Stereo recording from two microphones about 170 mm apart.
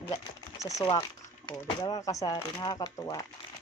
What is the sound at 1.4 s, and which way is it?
Speech, 20° left (ahead or behind).